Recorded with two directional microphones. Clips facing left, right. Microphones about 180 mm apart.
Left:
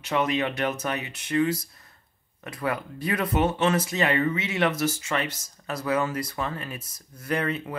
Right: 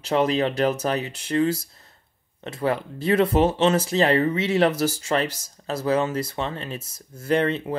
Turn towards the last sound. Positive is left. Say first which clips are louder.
# right 6 dB
turn(degrees=-30)  # may be behind; listen again after turning